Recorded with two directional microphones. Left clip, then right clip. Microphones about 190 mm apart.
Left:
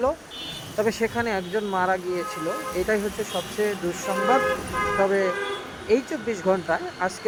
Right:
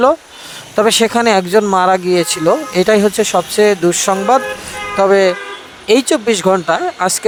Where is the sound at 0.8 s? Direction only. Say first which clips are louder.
Right 15 dB; 55° right (ahead or behind).